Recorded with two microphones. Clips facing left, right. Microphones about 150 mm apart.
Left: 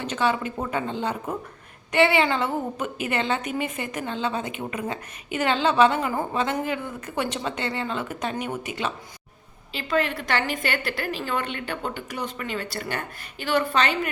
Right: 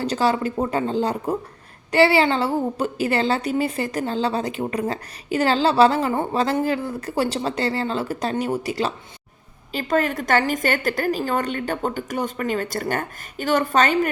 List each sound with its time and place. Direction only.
0.0 s a woman's voice: 35° right (ahead or behind)